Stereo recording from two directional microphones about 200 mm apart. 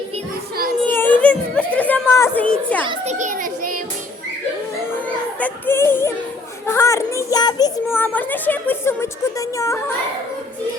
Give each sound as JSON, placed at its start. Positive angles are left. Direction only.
{"t": 0.9, "sound": "chatter", "side_deg": 10}
{"t": 2.8, "sound": "children playing", "side_deg": -30}
{"t": 5.0, "sound": "children playing", "side_deg": 10}
{"t": 6.7, "sound": "speech", "side_deg": 15}